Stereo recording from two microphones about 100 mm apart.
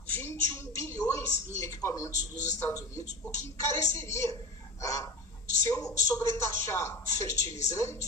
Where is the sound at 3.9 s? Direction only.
30° left (ahead or behind).